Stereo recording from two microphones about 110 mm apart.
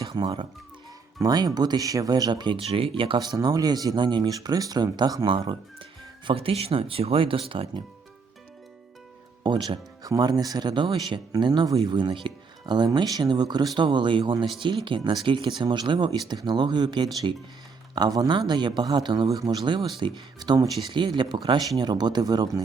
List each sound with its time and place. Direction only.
1.2 s speech: 35° right (ahead or behind)
2.6 s speech: 60° right (ahead or behind)
3.2 s speech: 35° right (ahead or behind)
5.5 s speech: 50° right (ahead or behind)
9.4 s speech: 45° right (ahead or behind)